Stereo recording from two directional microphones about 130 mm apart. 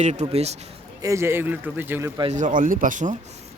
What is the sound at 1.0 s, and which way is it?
A man's voice, 20° right (ahead or behind).